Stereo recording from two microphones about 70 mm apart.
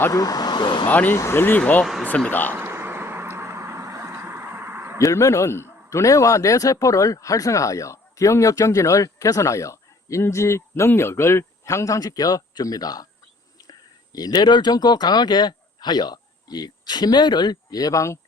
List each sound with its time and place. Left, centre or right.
0.1 s speech: left
0.9 s speech: left
1.1 s speech: left
1.8 s vehicle: centre
2.0 s speech: centre
2.5 s a sound: right
4.9 s a man's voice: left
11.9 s speech: left